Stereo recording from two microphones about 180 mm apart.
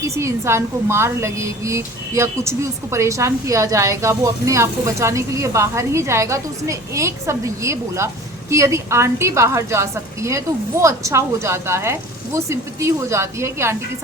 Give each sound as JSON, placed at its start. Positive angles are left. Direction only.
{"t": 0.0, "sound": "a woman's voice", "side_deg": -15}